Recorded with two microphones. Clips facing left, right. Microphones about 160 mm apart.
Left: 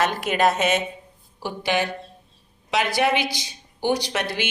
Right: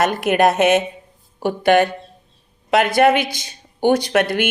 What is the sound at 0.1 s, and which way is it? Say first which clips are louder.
A woman's voice: right 5 dB; 55° right (ahead or behind).